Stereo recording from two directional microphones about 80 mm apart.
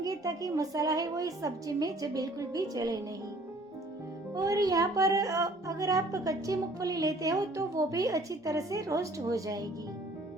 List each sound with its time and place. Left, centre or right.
0.0 s a woman's voice: right
4.4 s a woman's voice: right